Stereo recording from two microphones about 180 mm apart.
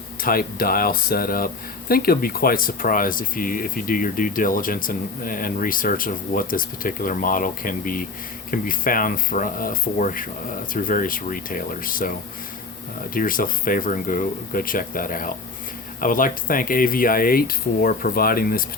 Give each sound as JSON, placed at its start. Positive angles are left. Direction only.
{"t": 0.2, "sound": "speech", "side_deg": 55}
{"t": 13.1, "sound": "speech", "side_deg": 50}